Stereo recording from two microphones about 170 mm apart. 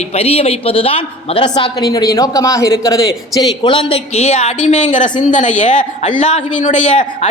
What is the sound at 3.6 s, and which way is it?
A man's voice, 35° left (ahead or behind).